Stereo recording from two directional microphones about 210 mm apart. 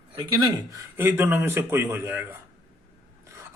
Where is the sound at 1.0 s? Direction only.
10° right (ahead or behind).